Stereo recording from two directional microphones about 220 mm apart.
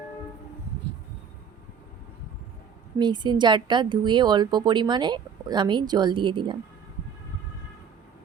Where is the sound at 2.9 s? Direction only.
20° right (ahead or behind).